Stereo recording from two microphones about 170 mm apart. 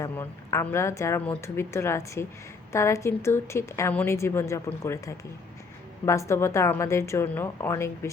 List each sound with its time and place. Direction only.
0.0 s a woman's voice: 15° left (ahead or behind)